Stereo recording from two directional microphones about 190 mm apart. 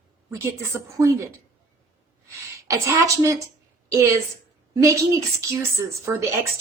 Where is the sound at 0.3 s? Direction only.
15° right (ahead or behind).